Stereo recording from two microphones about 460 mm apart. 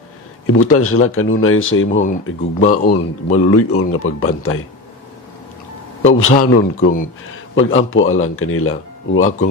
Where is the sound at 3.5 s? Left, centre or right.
Left.